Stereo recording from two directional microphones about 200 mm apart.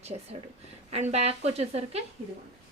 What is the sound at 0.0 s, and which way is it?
Speech, 35° right (ahead or behind).